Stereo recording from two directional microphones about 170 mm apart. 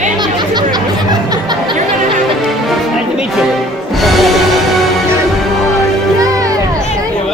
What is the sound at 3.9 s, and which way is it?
Music, centre (ahead or behind).